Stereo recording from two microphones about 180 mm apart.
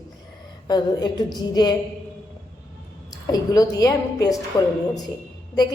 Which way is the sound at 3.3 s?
20° left (ahead or behind).